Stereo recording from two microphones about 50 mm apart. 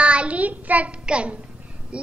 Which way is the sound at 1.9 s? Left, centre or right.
Right.